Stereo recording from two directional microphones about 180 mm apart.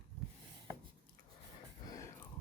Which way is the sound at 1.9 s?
15° left (ahead or behind).